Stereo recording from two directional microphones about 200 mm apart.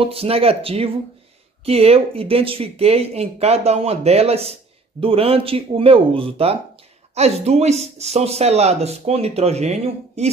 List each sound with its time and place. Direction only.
0.0 s speech: 30° right (ahead or behind)